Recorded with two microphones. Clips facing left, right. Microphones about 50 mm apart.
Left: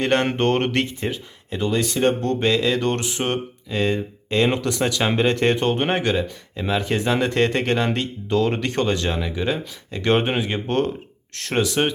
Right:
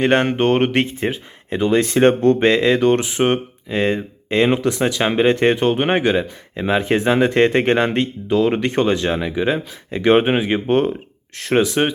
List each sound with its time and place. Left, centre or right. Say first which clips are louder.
0.0 s speech: right 4 dB; right
0.8 s speech: right 4 dB; right
2.3 s mantra: right 5 dB; right
2.8 s speech: right 7 dB; centre
8.3 s speech: right 3 dB; centre